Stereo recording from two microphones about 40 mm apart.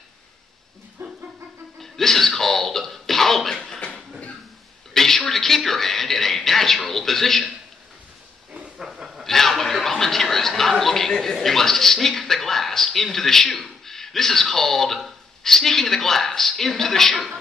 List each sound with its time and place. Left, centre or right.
1.0 s a sound: right
1.8 s cough: centre
4.9 s a man's voice: centre
8.5 s hiss: right
8.8 s train: centre
9.2 s a man's voice: centre